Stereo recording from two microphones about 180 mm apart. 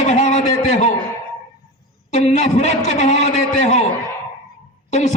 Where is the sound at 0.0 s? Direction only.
40° left (ahead or behind).